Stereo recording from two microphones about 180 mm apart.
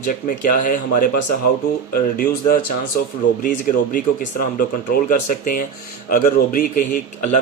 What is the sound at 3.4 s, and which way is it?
Speech, 50° left (ahead or behind).